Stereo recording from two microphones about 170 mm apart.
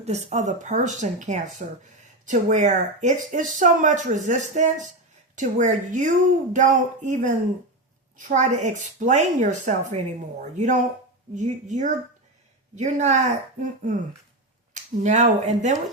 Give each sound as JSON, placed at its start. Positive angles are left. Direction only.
{"t": 0.0, "sound": "speech", "side_deg": -40}